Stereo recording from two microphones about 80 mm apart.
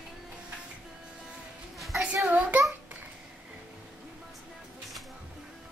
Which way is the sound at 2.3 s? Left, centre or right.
Centre.